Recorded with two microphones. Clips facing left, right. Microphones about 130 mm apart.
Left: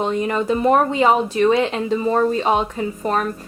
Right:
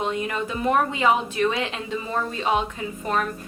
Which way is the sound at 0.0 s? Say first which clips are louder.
Left 6 dB; 35° left (ahead or behind).